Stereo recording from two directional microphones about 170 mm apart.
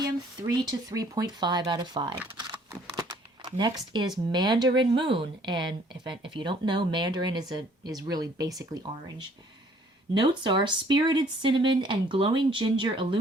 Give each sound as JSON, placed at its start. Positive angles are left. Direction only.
{"t": 0.9, "sound": "speech", "side_deg": -20}
{"t": 2.4, "sound": "a sound", "side_deg": -20}
{"t": 3.4, "sound": "speech", "side_deg": -25}